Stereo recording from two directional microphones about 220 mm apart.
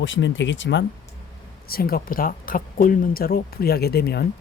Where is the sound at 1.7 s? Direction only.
45° left (ahead or behind).